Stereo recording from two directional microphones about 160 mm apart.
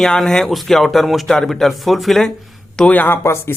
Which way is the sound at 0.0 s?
5° left (ahead or behind).